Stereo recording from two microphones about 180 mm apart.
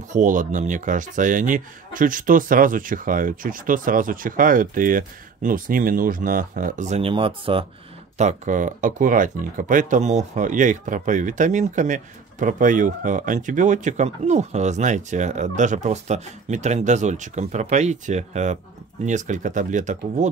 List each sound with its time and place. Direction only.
0.1 s speech: 45° right (ahead or behind); by 7.6 s 30° right (ahead or behind)
8.2 s speech: 40° right (ahead or behind)